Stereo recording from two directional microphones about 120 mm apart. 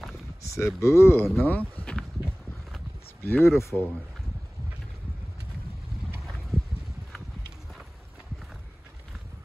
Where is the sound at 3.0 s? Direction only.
20° left (ahead or behind).